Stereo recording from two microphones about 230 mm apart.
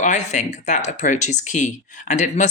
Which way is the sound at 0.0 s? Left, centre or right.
Left.